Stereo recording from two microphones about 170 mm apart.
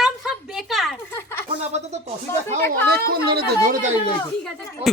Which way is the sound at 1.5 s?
40° right (ahead or behind).